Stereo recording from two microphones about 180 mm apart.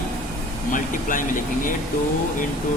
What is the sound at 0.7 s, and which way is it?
Speech, 45° left (ahead or behind).